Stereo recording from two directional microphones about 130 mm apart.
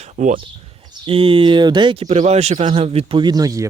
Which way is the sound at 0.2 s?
75° right (ahead or behind).